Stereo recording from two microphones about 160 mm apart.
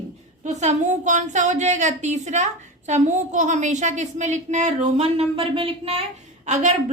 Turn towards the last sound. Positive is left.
turn(degrees=-45)  # may be behind; listen again after turning